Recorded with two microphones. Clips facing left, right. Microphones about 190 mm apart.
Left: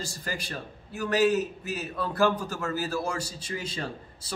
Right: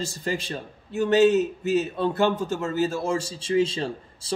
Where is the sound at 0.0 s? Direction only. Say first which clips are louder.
Right 7 dB; 25° right (ahead or behind).